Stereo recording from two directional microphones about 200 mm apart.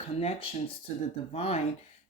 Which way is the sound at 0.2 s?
30° left (ahead or behind).